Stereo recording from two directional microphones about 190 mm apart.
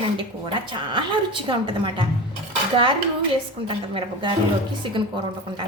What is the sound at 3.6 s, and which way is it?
A woman's voice, 25° right (ahead or behind).